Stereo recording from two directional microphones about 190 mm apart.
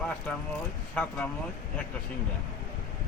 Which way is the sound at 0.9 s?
5° left (ahead or behind).